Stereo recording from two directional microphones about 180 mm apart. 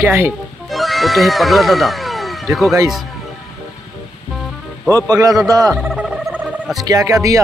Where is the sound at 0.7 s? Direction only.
Centre (ahead or behind).